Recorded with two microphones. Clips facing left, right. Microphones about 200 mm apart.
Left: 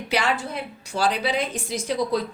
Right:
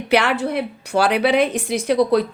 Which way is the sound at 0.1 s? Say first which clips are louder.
Right 7 dB; 65° right (ahead or behind).